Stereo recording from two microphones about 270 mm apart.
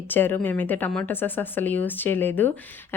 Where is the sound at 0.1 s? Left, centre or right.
Centre.